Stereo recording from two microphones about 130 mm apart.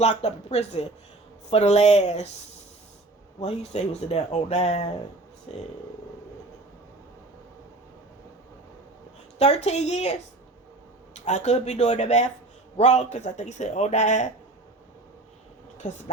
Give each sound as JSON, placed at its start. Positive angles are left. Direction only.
{"t": 0.0, "sound": "speech", "side_deg": 60}
{"t": 3.4, "sound": "speech", "side_deg": 55}
{"t": 9.4, "sound": "speech", "side_deg": 55}
{"t": 11.3, "sound": "speech", "side_deg": 60}
{"t": 15.8, "sound": "a woman's voice", "side_deg": 70}